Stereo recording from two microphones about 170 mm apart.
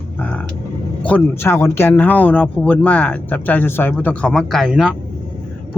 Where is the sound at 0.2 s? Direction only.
10° left (ahead or behind).